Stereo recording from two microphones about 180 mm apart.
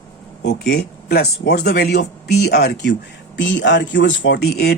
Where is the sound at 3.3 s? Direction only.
85° left; by 4.7 s 65° left (ahead or behind).